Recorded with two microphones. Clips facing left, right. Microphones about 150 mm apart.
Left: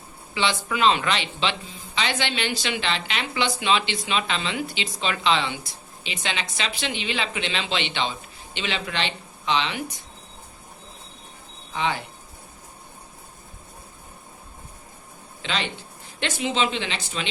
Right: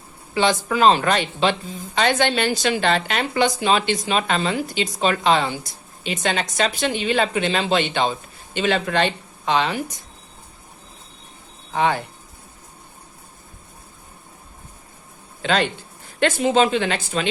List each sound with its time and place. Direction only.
0.3 s speech: 45° right (ahead or behind)
11.7 s speech: 50° right (ahead or behind)
15.4 s speech: 50° right (ahead or behind)